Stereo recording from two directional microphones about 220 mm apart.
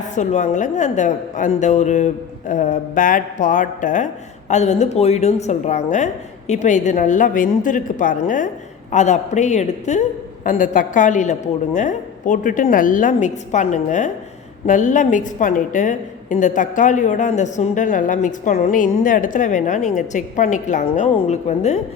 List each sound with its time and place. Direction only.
0.1 s a woman's voice: 35° left (ahead or behind)